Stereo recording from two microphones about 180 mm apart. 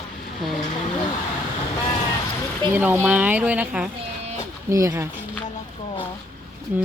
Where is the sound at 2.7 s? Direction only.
10° right (ahead or behind).